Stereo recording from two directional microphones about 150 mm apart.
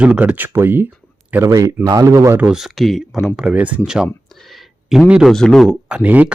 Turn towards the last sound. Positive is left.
turn(degrees=-10)  # may be behind; listen again after turning